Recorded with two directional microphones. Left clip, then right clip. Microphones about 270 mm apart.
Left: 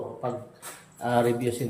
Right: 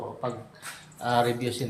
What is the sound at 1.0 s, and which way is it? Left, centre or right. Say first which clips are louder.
Speech: left 1 dB; centre.